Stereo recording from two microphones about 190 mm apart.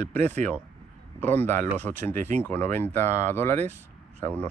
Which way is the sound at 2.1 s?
40° right (ahead or behind).